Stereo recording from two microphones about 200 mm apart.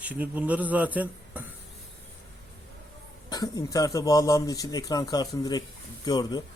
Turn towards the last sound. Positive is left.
turn(degrees=20)  # may be behind; listen again after turning